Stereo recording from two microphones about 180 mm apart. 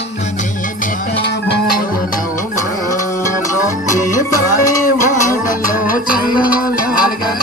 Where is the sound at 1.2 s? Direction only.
60° left (ahead or behind).